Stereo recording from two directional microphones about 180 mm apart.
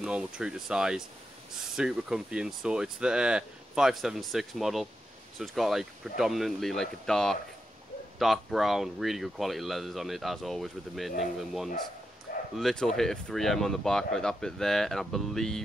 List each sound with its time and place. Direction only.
0.0 s speech: 5° right (ahead or behind)